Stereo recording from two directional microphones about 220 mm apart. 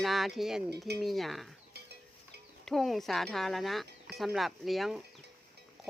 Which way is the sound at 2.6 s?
Centre (ahead or behind).